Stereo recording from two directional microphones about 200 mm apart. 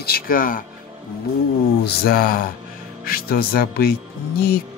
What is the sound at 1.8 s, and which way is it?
Speech, 50° left (ahead or behind).